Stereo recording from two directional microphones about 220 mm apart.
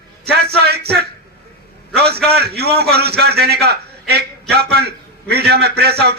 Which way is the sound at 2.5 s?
45° right (ahead or behind).